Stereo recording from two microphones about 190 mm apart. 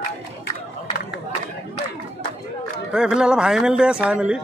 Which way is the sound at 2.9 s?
5° right (ahead or behind).